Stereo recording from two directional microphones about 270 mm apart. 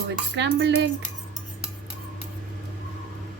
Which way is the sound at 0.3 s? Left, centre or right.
Right.